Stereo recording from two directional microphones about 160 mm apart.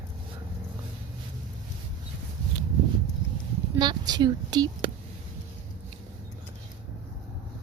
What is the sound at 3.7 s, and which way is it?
Speech, 30° right (ahead or behind).